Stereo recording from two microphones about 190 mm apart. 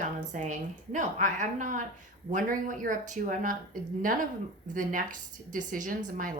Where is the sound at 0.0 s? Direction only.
40° right (ahead or behind).